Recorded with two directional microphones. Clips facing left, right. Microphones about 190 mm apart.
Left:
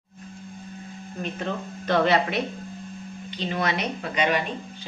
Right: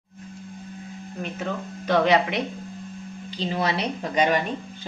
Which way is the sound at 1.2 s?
10° right (ahead or behind).